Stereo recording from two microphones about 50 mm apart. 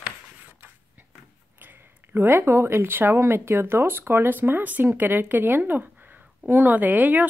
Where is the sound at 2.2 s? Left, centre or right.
Right.